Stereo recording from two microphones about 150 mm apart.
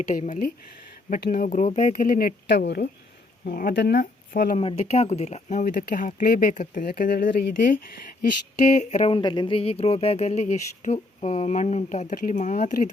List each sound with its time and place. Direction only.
0.1 s speech: 60° left (ahead or behind); by 2.9 s 90° left
3.4 s speech: 75° left (ahead or behind)
4.5 s speech: 40° left (ahead or behind)
5.6 s speech: 65° left (ahead or behind); by 7.9 s 85° left
8.6 s speech: 50° left (ahead or behind)
9.1 s speech: 30° left (ahead or behind); by 12.9 s 55° left (ahead or behind)